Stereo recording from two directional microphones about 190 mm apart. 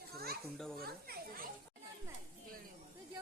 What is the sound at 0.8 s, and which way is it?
Speech, 55° right (ahead or behind).